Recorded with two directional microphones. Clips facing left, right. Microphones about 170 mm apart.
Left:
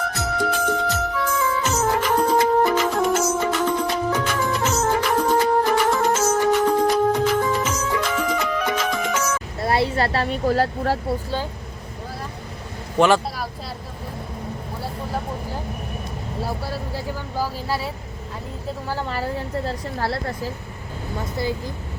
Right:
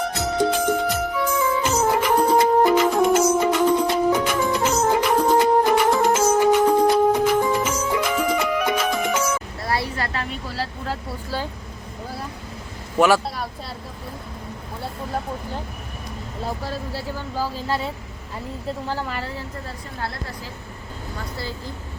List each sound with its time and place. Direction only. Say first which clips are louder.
0.0 s music: right 3 dB; 20° right (ahead or behind)
9.6 s a sound: left 5 dB; 25° left (ahead or behind)
10.4 s speech: left 9 dB; 50° left (ahead or behind)
13.0 s speech: even; 5° right (ahead or behind)
16.6 s speech: left 1 dB; 10° left (ahead or behind)
21.2 s speech: left 7 dB; 20° left (ahead or behind)